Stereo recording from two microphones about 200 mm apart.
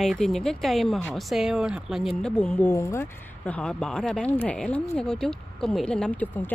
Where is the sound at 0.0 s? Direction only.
Centre (ahead or behind).